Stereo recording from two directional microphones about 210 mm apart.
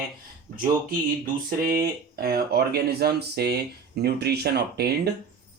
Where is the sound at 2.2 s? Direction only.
45° right (ahead or behind).